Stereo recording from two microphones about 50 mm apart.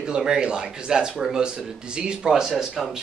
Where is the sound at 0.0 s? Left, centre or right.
Centre.